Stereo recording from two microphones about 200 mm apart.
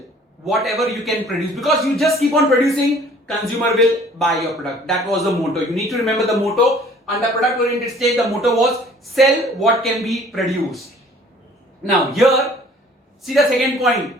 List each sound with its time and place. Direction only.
0.4 s speech: centre (ahead or behind)
11.9 s speech: centre (ahead or behind)